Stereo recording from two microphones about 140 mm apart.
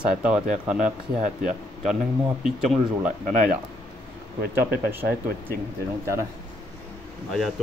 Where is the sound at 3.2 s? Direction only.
65° right (ahead or behind).